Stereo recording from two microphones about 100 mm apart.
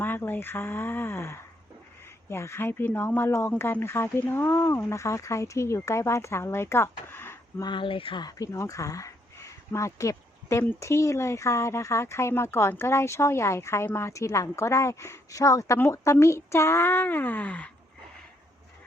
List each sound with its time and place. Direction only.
0.0 s speech: 20° left (ahead or behind)
7.6 s speech: 55° left (ahead or behind)
8.2 s speech: 35° left (ahead or behind); by 17.7 s 15° left (ahead or behind)